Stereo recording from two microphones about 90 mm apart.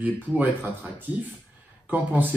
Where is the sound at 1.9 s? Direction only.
20° right (ahead or behind).